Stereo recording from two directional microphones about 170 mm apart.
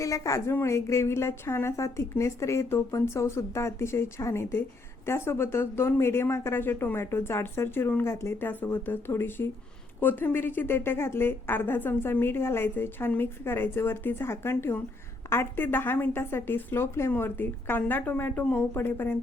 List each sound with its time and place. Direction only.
0.0 s a woman's voice: 20° left (ahead or behind)